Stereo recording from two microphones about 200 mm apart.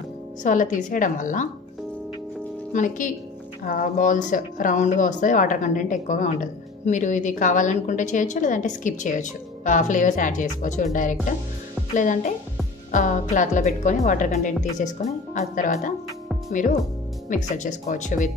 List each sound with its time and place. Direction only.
0.4 s speech: 40° left (ahead or behind)
2.7 s speech: 40° left (ahead or behind)